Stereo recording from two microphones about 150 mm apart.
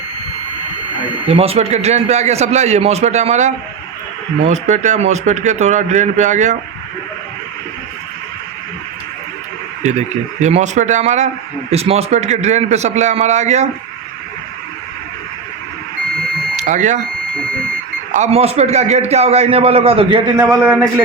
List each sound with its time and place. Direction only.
1.3 s a man's voice: 40° right (ahead or behind)
10.4 s a man's voice: 50° right (ahead or behind)
16.6 s speech: 55° right (ahead or behind)
18.1 s a man's voice: 45° right (ahead or behind)
20.5 s a man's voice: 5° right (ahead or behind)